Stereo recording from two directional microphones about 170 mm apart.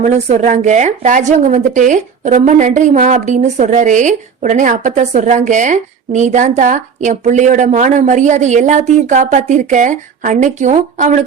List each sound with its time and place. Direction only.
0.0 s a woman's voice: 45° right (ahead or behind)